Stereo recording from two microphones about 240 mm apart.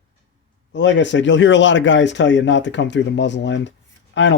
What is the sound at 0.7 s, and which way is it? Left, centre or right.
Speech, left.